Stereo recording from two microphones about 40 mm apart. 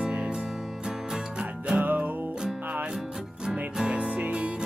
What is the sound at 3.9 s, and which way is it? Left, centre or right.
Music, right.